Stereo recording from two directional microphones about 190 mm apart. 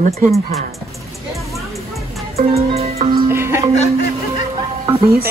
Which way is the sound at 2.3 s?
30° right (ahead or behind).